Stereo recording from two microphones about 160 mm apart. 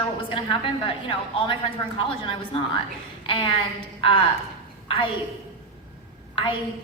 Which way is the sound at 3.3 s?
30° left (ahead or behind).